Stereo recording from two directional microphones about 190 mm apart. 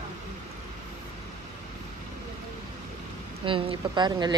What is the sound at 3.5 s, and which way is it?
Speech, 25° right (ahead or behind).